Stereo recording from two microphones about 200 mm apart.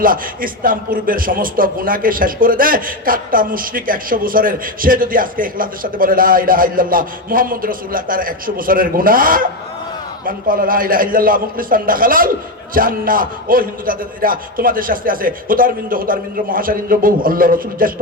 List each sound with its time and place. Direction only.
0.0 s a man's voice: 45° right (ahead or behind)